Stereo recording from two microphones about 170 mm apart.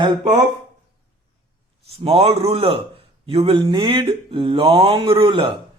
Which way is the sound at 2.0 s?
35° right (ahead or behind).